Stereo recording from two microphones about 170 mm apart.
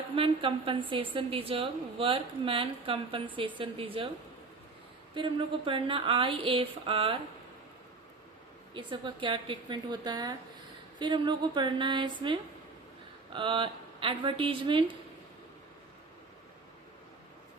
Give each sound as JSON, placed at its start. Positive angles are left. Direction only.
{"t": 0.2, "sound": "a woman's voice", "side_deg": -30}
{"t": 5.1, "sound": "a woman's voice", "side_deg": -30}
{"t": 8.7, "sound": "a woman's voice", "side_deg": -30}